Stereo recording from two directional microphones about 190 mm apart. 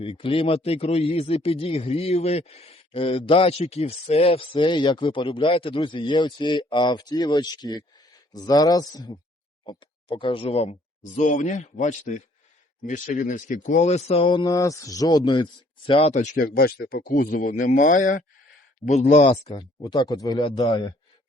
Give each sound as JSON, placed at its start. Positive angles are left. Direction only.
{"t": 0.0, "sound": "speech", "side_deg": 30}